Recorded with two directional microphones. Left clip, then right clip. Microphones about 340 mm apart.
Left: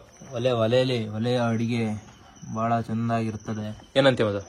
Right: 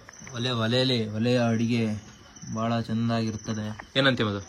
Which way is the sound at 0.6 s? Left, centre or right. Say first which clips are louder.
Left 3 dB; left.